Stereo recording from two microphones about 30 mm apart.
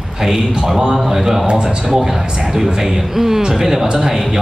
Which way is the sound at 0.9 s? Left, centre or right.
Centre.